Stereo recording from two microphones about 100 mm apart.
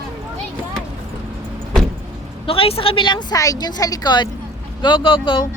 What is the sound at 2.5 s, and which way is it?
A woman's voice, 70° left (ahead or behind).